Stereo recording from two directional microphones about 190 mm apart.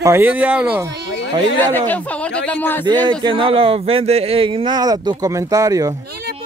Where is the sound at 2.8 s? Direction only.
25° right (ahead or behind).